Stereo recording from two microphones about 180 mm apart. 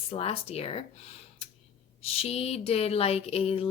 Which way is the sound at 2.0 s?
30° left (ahead or behind).